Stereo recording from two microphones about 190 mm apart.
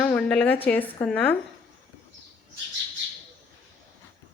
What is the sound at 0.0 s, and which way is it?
Speech, 5° left (ahead or behind).